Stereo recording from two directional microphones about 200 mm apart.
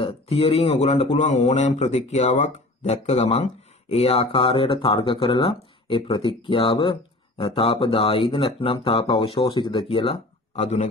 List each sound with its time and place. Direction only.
0.0 s speech: 30° left (ahead or behind)